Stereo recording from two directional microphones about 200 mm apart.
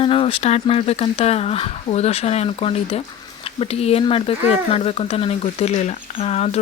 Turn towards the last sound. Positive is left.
turn(degrees=30)  # may be behind; listen again after turning